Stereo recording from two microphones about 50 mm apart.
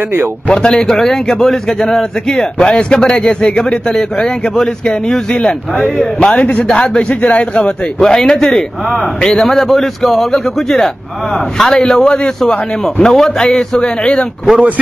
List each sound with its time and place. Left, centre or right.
0.5 s a man's voice: centre
8.0 s a man's voice: centre